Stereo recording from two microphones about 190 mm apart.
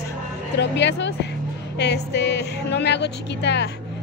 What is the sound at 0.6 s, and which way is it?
A woman's voice, 65° left (ahead or behind).